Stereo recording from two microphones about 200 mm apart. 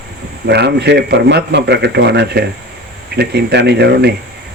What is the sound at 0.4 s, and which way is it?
A man's voice, 55° right (ahead or behind).